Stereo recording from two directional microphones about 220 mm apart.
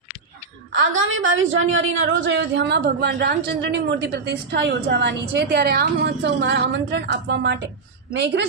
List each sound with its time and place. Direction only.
0.7 s a woman's voice: 55° right (ahead or behind)